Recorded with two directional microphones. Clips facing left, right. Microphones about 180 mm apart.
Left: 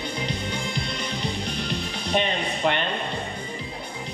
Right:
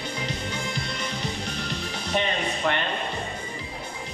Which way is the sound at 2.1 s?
20° left (ahead or behind).